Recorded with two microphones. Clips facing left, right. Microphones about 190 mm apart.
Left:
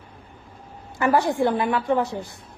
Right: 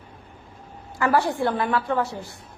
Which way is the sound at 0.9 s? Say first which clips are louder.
Left 2 dB; 15° left (ahead or behind).